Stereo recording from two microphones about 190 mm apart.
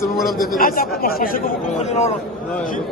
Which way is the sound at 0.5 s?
50° left (ahead or behind).